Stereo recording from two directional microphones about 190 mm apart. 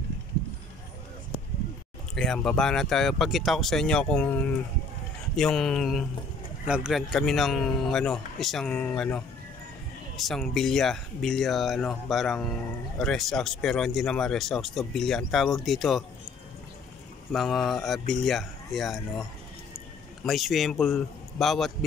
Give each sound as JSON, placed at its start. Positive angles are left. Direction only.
{"t": 2.1, "sound": "speech", "side_deg": 5}
{"t": 20.2, "sound": "speech", "side_deg": 0}